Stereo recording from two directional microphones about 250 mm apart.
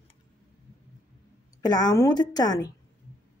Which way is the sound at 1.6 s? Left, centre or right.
Centre.